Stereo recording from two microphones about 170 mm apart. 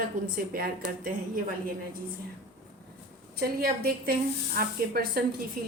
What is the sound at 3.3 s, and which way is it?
A woman's voice, 65° right (ahead or behind).